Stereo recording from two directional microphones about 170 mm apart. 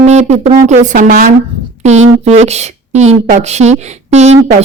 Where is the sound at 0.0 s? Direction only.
40° right (ahead or behind); by 1.3 s 60° right (ahead or behind).